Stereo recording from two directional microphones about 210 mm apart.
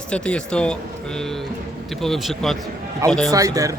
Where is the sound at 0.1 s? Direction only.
5° left (ahead or behind).